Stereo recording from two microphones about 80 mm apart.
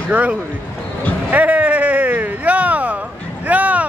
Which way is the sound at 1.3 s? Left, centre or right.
Centre.